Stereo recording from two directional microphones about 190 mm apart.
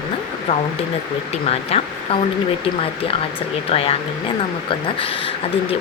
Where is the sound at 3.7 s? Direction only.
30° left (ahead or behind).